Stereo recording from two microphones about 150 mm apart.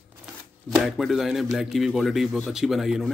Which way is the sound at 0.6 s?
Centre (ahead or behind).